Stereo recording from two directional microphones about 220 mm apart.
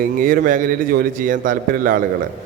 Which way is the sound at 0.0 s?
40° right (ahead or behind).